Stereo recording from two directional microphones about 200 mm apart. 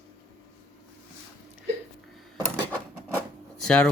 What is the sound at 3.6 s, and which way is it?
Speech, 5° left (ahead or behind).